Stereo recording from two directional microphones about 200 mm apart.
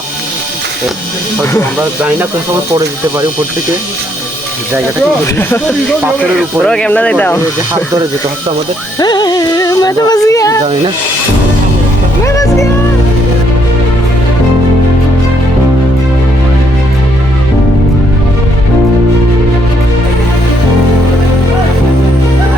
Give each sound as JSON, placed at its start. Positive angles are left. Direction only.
{"t": 2.0, "sound": "speech", "side_deg": -10}
{"t": 5.2, "sound": "speech", "side_deg": 10}
{"t": 9.0, "sound": "music", "side_deg": 20}
{"t": 12.2, "sound": "speech", "side_deg": 15}